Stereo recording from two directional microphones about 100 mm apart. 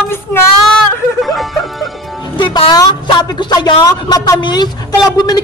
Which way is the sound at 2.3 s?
55° left (ahead or behind).